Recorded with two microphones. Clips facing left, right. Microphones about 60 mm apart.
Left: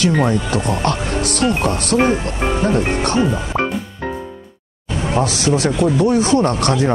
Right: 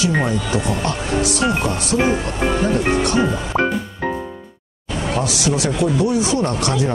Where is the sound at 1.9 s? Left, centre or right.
Centre.